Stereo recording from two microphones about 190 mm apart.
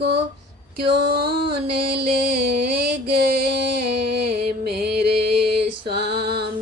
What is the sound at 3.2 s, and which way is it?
Music, 60° right (ahead or behind).